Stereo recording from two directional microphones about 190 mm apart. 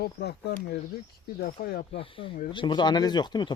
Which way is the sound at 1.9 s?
30° left (ahead or behind).